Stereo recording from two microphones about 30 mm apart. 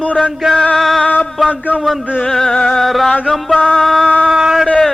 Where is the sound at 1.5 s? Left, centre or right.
Left.